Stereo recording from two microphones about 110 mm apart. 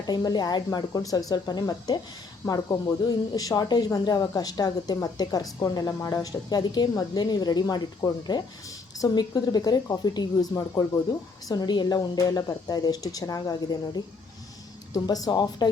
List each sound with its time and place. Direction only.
0.1 s speech: 40° left (ahead or behind)